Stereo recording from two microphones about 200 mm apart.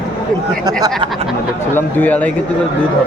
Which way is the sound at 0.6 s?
20° right (ahead or behind).